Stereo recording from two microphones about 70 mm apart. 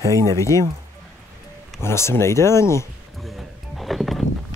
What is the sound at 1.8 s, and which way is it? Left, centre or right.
Speech, left.